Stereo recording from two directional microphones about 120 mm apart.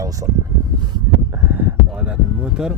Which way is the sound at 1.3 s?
15° right (ahead or behind).